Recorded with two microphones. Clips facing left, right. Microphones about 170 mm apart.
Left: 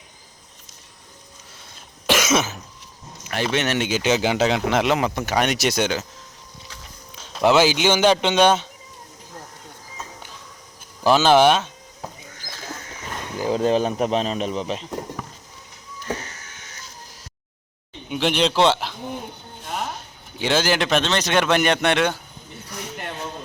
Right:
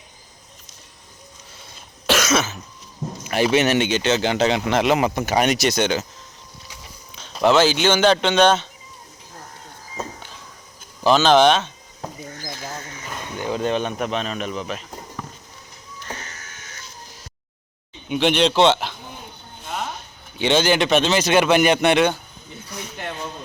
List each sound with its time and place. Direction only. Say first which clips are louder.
2.0 s cough: even; 10° left (ahead or behind)
3.2 s speech: right 5 dB; 10° right (ahead or behind)
5.5 s speech: right 2 dB; 5° left (ahead or behind)
7.4 s speech: even; 10° left (ahead or behind)
11.0 s speech: even; 10° left (ahead or behind)
13.4 s speech: left 3 dB; 35° left (ahead or behind)
18.1 s speech: right 3 dB; 5° left (ahead or behind)
19.6 s a sound: even; 5° left (ahead or behind)
20.4 s speech: right 3 dB; centre (ahead or behind)